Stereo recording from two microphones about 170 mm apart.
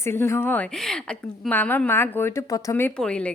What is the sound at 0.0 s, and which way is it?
A woman's voice, 15° left (ahead or behind).